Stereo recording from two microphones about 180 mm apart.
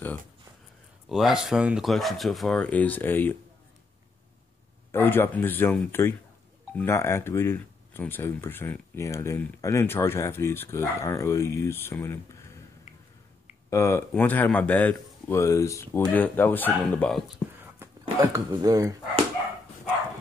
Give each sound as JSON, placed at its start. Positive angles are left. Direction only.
{"t": 1.0, "sound": "speech", "side_deg": 0}
{"t": 4.9, "sound": "speech", "side_deg": 10}
{"t": 13.7, "sound": "speech", "side_deg": 15}
{"t": 18.2, "sound": "speech", "side_deg": -20}